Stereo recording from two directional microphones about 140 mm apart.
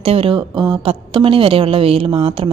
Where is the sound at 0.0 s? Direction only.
45° right (ahead or behind).